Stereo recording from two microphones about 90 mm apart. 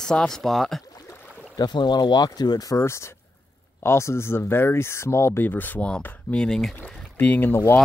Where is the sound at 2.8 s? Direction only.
30° left (ahead or behind); by 6.8 s 5° left (ahead or behind).